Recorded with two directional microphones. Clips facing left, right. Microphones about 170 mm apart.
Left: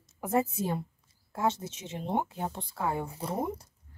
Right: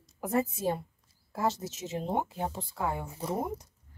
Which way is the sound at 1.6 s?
40° right (ahead or behind).